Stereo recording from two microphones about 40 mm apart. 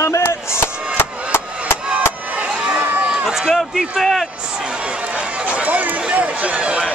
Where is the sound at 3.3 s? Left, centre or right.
Centre.